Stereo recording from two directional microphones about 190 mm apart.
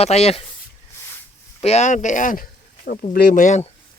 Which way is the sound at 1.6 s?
35° left (ahead or behind).